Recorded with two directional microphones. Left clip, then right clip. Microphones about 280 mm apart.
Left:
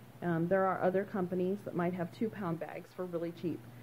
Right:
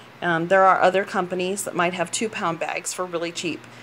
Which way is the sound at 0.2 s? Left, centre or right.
Centre.